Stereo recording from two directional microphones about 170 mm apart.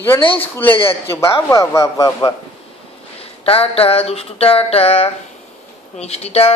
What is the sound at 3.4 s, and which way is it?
Speech, 35° left (ahead or behind).